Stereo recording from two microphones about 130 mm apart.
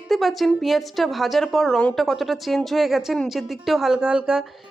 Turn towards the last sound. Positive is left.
turn(degrees=-5)  # may be behind; listen again after turning